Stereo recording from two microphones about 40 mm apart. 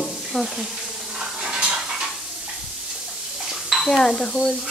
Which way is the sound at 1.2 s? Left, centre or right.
Right.